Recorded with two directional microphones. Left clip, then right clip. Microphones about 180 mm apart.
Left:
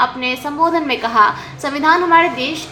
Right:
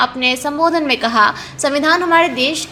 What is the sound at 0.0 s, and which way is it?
A woman's voice, 40° right (ahead or behind).